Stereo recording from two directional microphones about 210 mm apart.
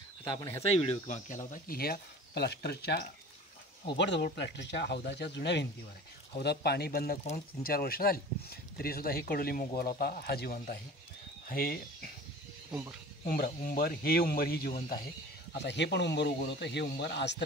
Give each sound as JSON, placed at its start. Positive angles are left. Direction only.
{"t": 0.2, "sound": "speech", "side_deg": 15}
{"t": 0.8, "sound": "speech", "side_deg": 35}
{"t": 13.3, "sound": "speech", "side_deg": 45}
{"t": 15.5, "sound": "speech", "side_deg": 55}